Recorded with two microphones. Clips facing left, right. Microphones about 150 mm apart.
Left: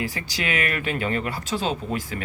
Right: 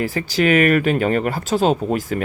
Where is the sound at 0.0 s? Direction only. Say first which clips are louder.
Right 10 dB; 45° right (ahead or behind).